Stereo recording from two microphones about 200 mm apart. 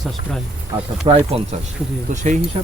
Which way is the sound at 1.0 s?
25° right (ahead or behind).